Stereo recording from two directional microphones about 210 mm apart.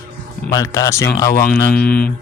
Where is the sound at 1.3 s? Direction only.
45° left (ahead or behind).